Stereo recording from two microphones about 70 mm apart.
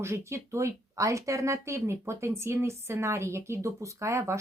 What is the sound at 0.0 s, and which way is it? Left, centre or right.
Speech, right.